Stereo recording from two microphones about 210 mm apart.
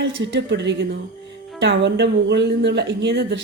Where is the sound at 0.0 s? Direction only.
55° right (ahead or behind).